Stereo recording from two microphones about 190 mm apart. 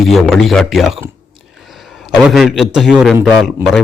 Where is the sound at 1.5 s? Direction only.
Centre (ahead or behind).